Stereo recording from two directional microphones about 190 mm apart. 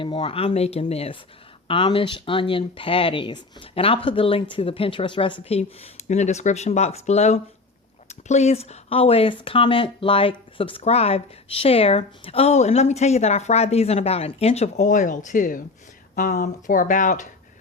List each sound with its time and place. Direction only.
0.0 s speech: 30° left (ahead or behind)